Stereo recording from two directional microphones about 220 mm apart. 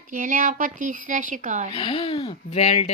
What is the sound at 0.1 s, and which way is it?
Speech, 35° right (ahead or behind).